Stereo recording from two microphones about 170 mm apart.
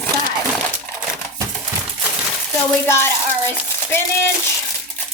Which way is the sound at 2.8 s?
15° left (ahead or behind).